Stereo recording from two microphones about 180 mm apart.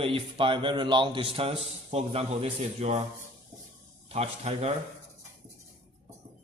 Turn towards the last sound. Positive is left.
turn(degrees=-35)  # may be behind; listen again after turning